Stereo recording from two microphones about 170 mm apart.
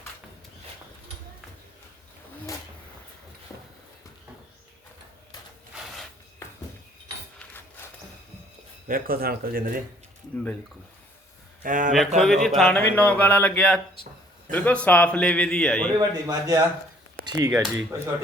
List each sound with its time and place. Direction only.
8.9 s speech: 60° right (ahead or behind)
11.6 s a man's voice: 50° right (ahead or behind)
11.9 s a man's voice: centre (ahead or behind)
16.0 s a man's voice: 20° right (ahead or behind)
17.5 s a man's voice: 5° right (ahead or behind)